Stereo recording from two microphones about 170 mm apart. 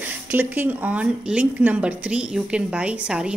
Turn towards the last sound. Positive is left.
turn(degrees=-5)  # may be behind; listen again after turning